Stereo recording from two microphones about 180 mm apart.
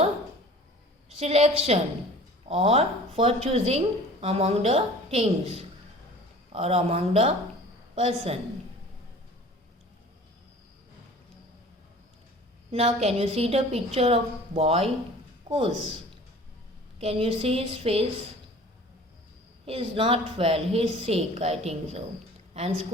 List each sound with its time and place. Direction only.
1.1 s a woman's voice: 35° right (ahead or behind)
12.7 s a woman's voice: 35° right (ahead or behind)
17.0 s a woman's voice: 35° right (ahead or behind)
19.6 s a woman's voice: 30° right (ahead or behind)